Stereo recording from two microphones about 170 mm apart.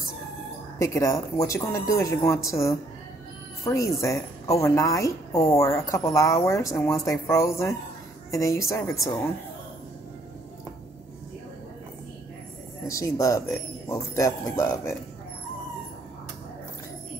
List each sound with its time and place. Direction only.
0.7 s speech: 20° left (ahead or behind)
12.8 s speech: 20° left (ahead or behind)